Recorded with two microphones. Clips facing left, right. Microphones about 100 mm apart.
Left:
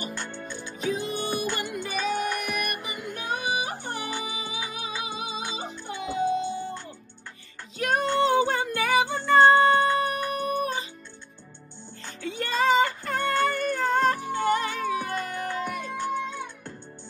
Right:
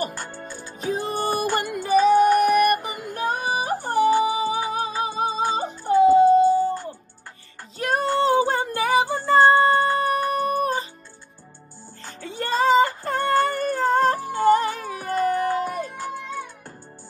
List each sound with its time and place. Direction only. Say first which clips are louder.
0.2 s music: right 1 dB; 40° right (ahead or behind)
12.2 s cat: right 3 dB; 35° right (ahead or behind)